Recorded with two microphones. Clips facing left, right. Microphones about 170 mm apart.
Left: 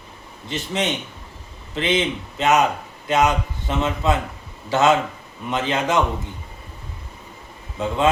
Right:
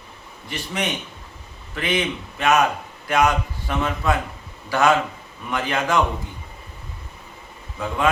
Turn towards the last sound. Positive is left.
turn(degrees=25)  # may be behind; listen again after turning